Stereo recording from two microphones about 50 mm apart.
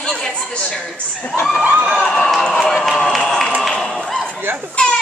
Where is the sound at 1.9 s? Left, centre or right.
Centre.